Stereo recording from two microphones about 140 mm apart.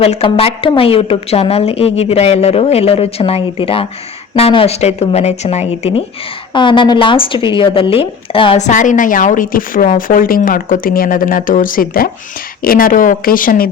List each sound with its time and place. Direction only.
0.0 s a woman's voice: 45° left (ahead or behind)
6.5 s a woman's voice: 35° left (ahead or behind)
8.5 s a woman's voice: 60° left (ahead or behind); by 13.7 s 85° left